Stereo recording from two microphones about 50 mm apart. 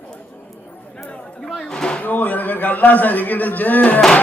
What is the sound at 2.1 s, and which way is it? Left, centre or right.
Music, left.